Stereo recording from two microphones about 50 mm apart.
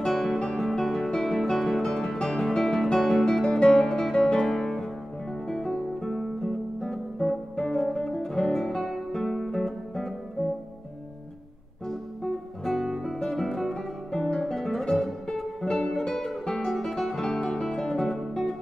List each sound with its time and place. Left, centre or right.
0.0 s music: centre
5.7 s guitar: centre
11.9 s music: centre